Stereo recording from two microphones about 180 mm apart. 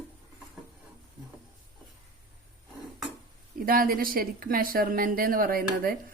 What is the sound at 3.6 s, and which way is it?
Speech, 50° right (ahead or behind).